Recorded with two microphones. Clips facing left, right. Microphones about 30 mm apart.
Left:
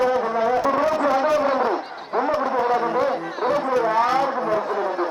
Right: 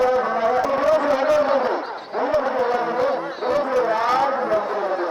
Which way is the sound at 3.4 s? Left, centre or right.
Centre.